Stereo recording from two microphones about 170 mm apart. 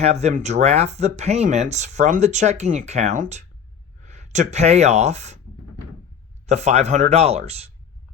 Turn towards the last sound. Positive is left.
turn(degrees=-35)  # may be behind; listen again after turning